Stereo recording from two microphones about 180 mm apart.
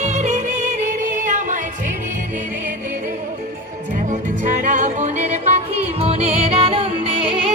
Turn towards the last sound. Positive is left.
turn(degrees=-30)  # may be behind; listen again after turning